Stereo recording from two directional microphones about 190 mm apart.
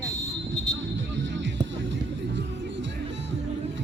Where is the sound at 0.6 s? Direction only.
70° right (ahead or behind).